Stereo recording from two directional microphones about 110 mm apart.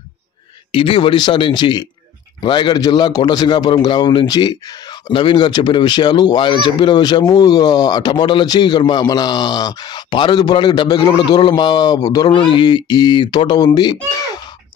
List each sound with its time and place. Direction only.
0.7 s speech: 55° left (ahead or behind)